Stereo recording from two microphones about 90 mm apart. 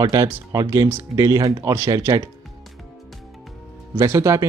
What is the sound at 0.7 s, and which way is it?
Speech, 25° right (ahead or behind).